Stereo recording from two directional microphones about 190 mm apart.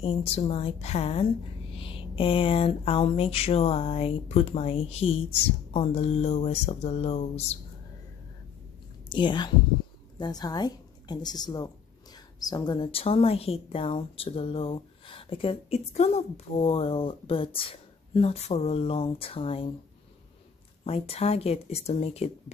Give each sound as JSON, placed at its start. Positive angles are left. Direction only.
{"t": 0.0, "sound": "speech", "side_deg": 30}
{"t": 9.1, "sound": "a woman's voice", "side_deg": 25}
{"t": 20.8, "sound": "speech", "side_deg": 30}